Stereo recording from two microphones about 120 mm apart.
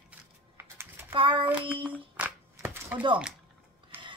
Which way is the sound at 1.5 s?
10° right (ahead or behind).